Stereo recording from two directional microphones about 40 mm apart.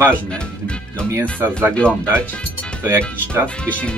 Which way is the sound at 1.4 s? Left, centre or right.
Right.